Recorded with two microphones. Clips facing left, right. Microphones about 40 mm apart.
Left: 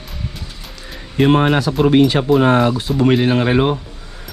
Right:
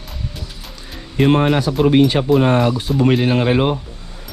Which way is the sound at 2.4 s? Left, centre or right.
Left.